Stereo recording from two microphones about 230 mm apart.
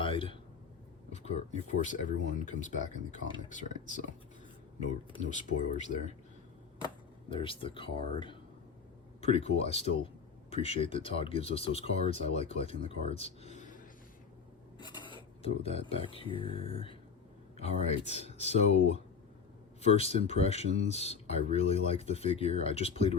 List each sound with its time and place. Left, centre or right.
0.0 s a sound: left
1.1 s speech: left
5.3 s speech: left
14.8 s a sound: centre
15.4 s speech: left
20.0 s speech: left